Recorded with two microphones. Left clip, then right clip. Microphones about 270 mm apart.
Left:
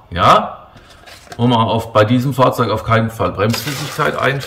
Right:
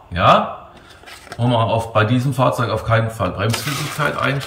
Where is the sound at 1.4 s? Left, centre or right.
Centre.